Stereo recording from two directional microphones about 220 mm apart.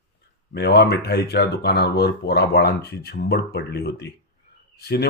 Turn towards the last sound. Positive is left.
turn(degrees=45)  # may be behind; listen again after turning